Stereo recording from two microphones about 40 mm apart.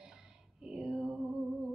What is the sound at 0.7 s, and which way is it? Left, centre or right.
Music, centre.